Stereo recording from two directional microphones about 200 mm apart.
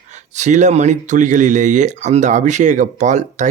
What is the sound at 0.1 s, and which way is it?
Speech, 35° right (ahead or behind).